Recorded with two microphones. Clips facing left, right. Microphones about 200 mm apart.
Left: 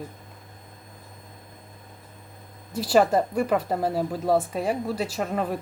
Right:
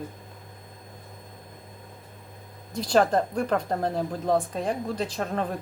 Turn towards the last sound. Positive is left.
turn(degrees=5)  # may be behind; listen again after turning